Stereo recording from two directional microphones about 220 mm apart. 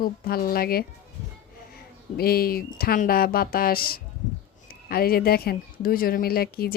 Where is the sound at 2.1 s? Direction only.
45° left (ahead or behind).